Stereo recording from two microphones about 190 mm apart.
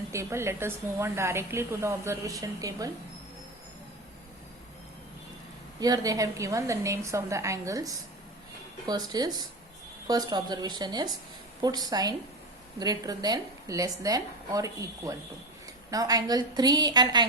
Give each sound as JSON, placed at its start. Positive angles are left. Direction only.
{"t": 0.1, "sound": "a woman's voice", "side_deg": -15}
{"t": 5.8, "sound": "a woman's voice", "side_deg": -20}